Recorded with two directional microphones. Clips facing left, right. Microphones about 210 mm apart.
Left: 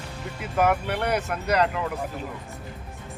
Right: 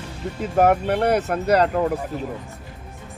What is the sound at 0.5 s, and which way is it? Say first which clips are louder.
Speech: right 5 dB; 40° right (ahead or behind).